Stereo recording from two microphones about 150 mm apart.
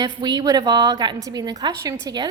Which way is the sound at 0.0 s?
25° right (ahead or behind).